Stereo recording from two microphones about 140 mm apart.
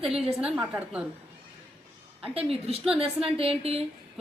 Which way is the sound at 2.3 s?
45° right (ahead or behind).